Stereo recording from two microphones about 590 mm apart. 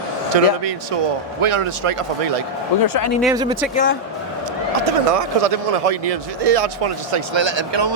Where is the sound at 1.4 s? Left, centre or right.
Right.